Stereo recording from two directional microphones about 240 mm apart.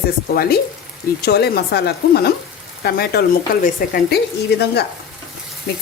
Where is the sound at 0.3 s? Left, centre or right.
Left.